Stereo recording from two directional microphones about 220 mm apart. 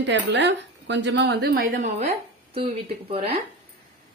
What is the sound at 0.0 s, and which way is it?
A woman's voice, 55° right (ahead or behind).